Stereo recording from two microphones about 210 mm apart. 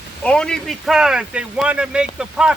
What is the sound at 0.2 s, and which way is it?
Speech, 5° left (ahead or behind).